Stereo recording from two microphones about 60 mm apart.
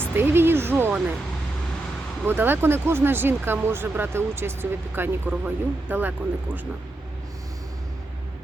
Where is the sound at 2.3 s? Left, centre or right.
Right.